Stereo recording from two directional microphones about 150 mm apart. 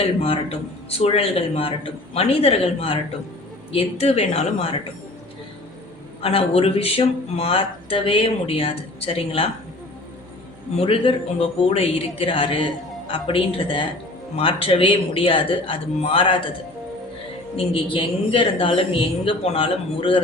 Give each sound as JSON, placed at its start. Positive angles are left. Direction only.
{"t": 0.0, "sound": "speech", "side_deg": 40}
{"t": 6.2, "sound": "speech", "side_deg": 40}
{"t": 10.8, "sound": "speech", "side_deg": 40}
{"t": 17.6, "sound": "speech", "side_deg": 35}